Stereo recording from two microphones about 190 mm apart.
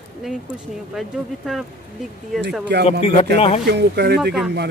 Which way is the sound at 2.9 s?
35° left (ahead or behind).